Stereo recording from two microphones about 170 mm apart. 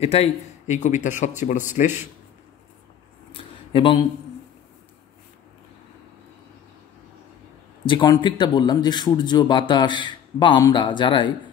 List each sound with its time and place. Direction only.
0.0 s speech: 35° left (ahead or behind)
3.7 s speech: 30° left (ahead or behind)
7.8 s speech: 25° left (ahead or behind)